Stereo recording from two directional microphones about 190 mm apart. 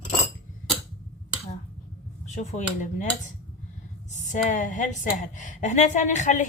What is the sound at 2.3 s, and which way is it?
A woman's voice, 40° left (ahead or behind).